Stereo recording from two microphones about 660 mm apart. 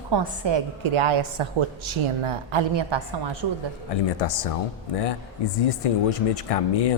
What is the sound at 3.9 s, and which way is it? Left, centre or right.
Speech, left.